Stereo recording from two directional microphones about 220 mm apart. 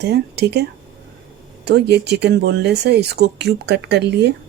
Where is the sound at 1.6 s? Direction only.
50° right (ahead or behind).